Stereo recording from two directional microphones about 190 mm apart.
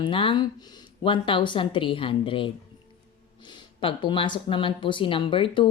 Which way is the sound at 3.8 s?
25° left (ahead or behind).